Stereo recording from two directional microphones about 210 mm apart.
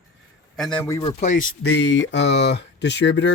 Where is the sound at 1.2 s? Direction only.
35° left (ahead or behind).